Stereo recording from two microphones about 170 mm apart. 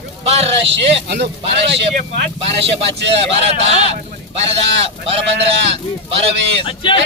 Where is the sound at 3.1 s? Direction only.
35° right (ahead or behind).